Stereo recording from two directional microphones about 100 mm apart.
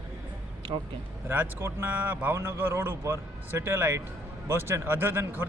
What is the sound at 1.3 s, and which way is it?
Speech, 20° right (ahead or behind).